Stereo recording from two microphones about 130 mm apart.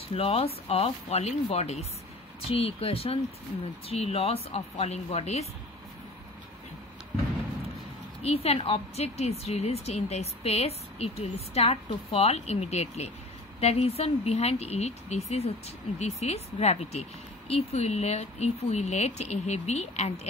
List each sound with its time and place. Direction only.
0.1 s speech: 50° left (ahead or behind)
8.2 s speech: 50° left (ahead or behind)